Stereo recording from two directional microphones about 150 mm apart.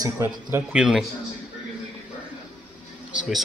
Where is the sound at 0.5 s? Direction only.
5° right (ahead or behind).